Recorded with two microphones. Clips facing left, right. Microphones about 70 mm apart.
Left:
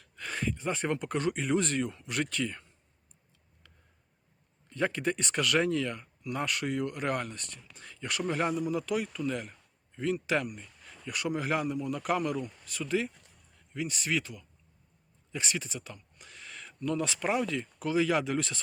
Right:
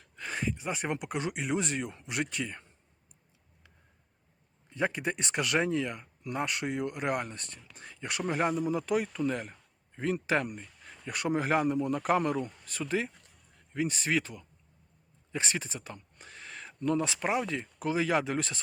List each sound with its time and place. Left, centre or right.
0.0 s speech: right
4.7 s a man's voice: centre